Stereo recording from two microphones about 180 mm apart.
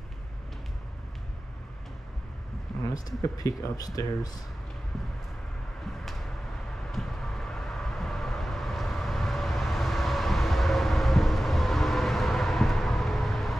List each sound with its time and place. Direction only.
2.9 s speech: 20° left (ahead or behind)
6.9 s vehicle: centre (ahead or behind)